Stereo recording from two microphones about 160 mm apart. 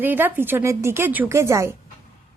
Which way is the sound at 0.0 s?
15° right (ahead or behind).